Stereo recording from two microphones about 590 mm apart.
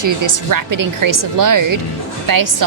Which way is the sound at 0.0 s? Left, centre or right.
Right.